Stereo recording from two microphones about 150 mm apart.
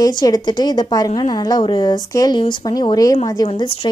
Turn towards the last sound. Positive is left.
turn(degrees=25)  # may be behind; listen again after turning